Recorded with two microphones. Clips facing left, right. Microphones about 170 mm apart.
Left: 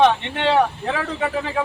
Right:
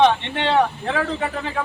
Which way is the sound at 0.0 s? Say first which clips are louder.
Even; centre (ahead or behind).